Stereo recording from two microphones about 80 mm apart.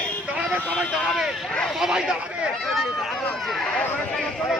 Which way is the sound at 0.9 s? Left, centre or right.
Centre.